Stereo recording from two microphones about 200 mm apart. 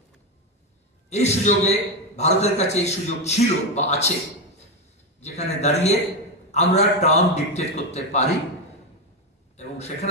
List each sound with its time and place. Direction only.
1.1 s a man's voice: 35° left (ahead or behind)
5.2 s a man's voice: 35° left (ahead or behind)
9.6 s a man's voice: 35° left (ahead or behind)